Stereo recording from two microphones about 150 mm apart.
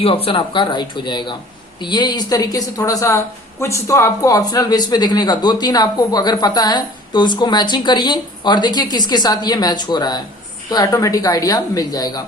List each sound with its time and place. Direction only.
0.0 s speech: 40° left (ahead or behind)